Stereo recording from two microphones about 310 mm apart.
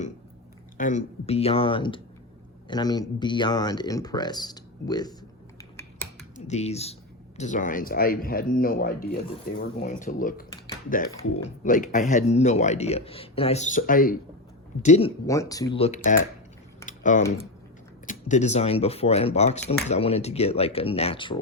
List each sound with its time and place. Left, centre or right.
0.8 s a man's voice: left
5.7 s finger snapping: centre
6.3 s a man's voice: left
11.4 s a man's voice: left
15.3 s speech: centre
16.8 s typing: left
18.0 s a man's voice: left